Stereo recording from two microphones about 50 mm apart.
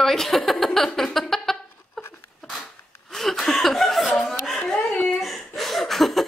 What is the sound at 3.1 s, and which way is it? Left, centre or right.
Chuckle, centre.